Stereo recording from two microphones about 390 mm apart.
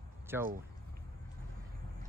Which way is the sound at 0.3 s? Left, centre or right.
Centre.